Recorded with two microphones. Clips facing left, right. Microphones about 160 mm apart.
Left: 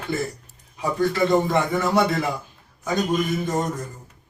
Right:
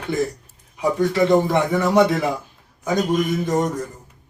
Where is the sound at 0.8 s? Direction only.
15° right (ahead or behind).